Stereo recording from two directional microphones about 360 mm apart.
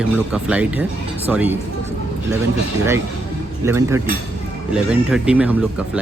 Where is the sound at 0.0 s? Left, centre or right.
Centre.